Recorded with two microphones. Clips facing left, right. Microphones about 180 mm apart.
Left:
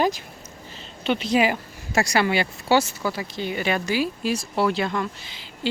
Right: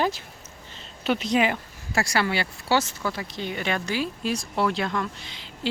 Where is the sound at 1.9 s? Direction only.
20° left (ahead or behind).